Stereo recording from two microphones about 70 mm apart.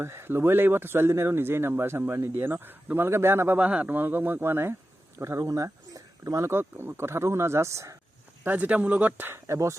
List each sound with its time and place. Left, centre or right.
0.0 s speech: right
3.6 s speech: centre
5.2 s speech: right
8.4 s speech: right
9.3 s speech: right